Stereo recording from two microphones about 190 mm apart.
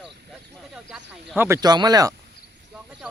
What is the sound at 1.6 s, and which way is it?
Speech, 20° right (ahead or behind).